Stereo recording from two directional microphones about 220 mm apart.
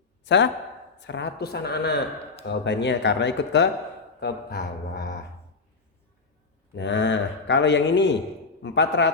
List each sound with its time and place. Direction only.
0.3 s speech: 55° left (ahead or behind)
6.7 s speech: 55° left (ahead or behind)